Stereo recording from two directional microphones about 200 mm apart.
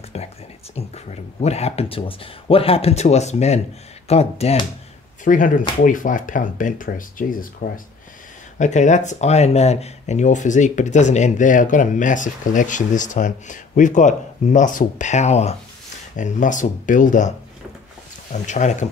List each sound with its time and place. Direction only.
0.1 s speech: 30° left (ahead or behind)
18.3 s speech: 35° left (ahead or behind)